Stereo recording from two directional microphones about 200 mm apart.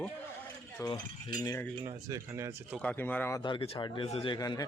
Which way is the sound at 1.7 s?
20° right (ahead or behind).